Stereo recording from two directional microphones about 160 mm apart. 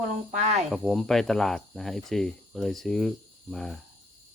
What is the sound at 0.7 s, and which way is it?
Speech, centre (ahead or behind).